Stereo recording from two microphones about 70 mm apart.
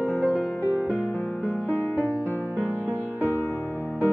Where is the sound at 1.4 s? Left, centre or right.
Left.